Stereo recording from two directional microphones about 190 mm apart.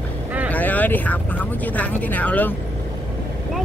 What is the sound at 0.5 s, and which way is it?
Speech, 10° left (ahead or behind).